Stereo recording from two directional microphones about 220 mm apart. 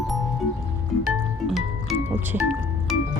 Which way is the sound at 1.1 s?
Centre (ahead or behind).